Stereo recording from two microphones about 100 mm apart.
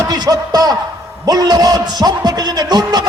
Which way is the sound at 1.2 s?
40° right (ahead or behind).